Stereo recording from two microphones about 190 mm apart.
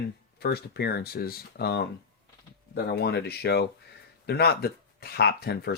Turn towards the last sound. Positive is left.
turn(degrees=60)  # may be behind; listen again after turning